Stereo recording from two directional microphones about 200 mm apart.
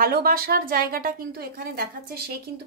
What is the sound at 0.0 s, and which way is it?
Speech, 50° right (ahead or behind).